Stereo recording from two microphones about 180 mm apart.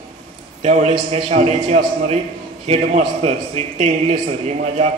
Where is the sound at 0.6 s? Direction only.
40° right (ahead or behind).